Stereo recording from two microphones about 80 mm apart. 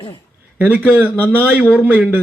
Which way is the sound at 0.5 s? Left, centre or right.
Right.